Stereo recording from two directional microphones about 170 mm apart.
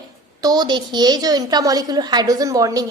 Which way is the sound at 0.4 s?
25° right (ahead or behind).